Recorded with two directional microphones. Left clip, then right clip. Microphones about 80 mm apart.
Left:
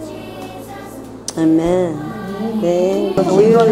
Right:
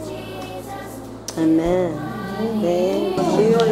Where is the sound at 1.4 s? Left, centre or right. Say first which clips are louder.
Left 4 dB; centre.